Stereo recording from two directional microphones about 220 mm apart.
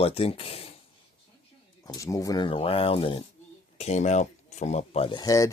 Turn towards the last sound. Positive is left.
turn(degrees=15)  # may be behind; listen again after turning